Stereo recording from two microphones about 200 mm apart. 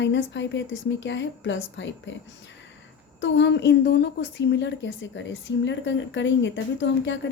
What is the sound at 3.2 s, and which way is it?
A woman's voice, 65° left (ahead or behind).